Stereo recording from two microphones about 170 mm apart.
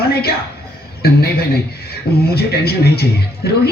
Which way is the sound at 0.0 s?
65° left (ahead or behind).